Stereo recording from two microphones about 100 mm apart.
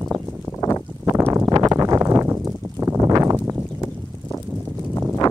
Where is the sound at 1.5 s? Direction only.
40° right (ahead or behind).